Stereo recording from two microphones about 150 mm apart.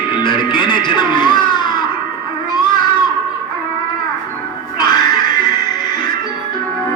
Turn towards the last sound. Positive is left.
turn(degrees=25)  # may be behind; listen again after turning